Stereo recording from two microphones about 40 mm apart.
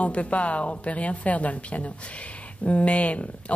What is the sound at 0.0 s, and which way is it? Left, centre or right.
Speech, left.